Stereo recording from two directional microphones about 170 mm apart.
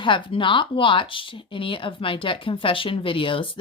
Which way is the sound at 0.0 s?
30° left (ahead or behind).